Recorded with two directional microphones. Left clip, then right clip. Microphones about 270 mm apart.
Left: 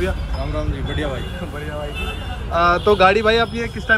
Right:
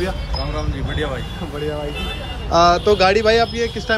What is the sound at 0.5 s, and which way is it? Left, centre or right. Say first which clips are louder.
Speech: even; centre.